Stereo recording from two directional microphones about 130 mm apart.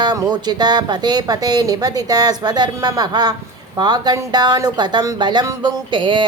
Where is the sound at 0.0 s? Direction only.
30° right (ahead or behind).